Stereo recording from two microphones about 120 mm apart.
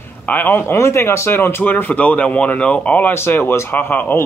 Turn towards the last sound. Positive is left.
turn(degrees=15)  # may be behind; listen again after turning